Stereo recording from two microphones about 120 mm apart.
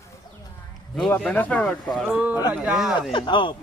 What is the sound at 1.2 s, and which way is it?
Speech, 10° left (ahead or behind).